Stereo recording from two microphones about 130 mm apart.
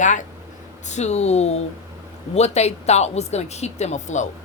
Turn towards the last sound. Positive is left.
turn(degrees=65)  # may be behind; listen again after turning